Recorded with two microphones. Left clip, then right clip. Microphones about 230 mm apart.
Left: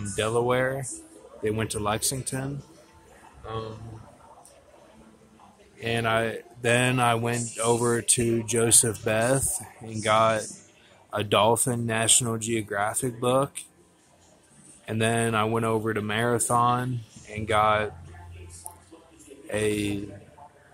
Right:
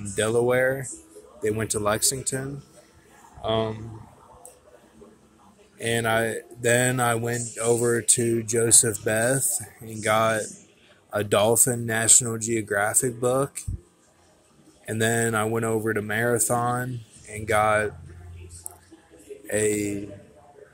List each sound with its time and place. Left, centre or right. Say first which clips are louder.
0.2 s speech: right 3 dB; centre
5.8 s speech: right 2 dB; centre
14.9 s speech: right 1 dB; centre
19.4 s a man's voice: right 2 dB; centre